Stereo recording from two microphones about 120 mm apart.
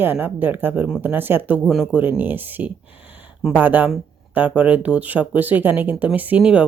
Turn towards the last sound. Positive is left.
turn(degrees=-10)  # may be behind; listen again after turning